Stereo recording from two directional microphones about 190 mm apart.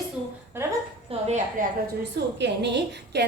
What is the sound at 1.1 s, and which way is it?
Speech, 35° right (ahead or behind).